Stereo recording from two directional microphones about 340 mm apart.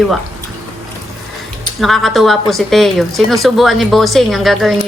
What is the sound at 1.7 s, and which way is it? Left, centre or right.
A woman's voice, centre.